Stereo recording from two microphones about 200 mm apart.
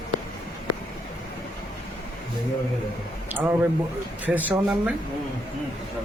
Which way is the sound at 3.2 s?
10° right (ahead or behind).